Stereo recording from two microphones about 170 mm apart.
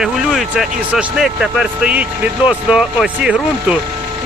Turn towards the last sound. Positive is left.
turn(degrees=-5)  # may be behind; listen again after turning